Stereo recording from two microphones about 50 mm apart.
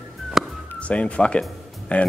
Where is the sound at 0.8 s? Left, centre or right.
Left.